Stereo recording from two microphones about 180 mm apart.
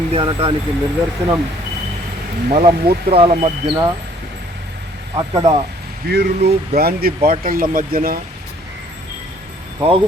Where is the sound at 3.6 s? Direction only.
25° right (ahead or behind).